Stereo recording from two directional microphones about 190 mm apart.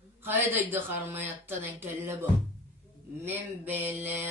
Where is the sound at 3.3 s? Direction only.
10° right (ahead or behind).